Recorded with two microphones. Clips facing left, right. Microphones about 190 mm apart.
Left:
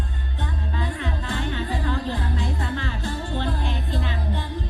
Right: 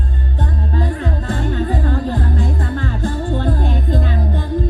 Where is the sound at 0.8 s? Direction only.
45° right (ahead or behind).